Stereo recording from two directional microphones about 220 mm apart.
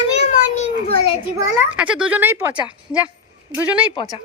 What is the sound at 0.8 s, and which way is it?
Speech, 25° left (ahead or behind).